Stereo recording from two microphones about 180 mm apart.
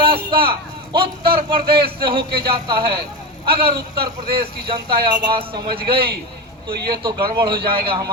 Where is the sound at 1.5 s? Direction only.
30° right (ahead or behind).